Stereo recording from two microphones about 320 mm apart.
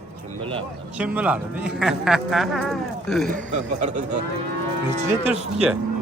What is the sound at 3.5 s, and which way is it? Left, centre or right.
Speech, right.